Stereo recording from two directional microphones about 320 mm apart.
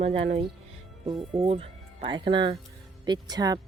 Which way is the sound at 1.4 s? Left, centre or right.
Centre.